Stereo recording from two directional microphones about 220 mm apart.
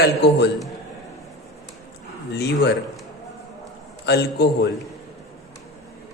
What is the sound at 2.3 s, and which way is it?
Speech, 50° left (ahead or behind).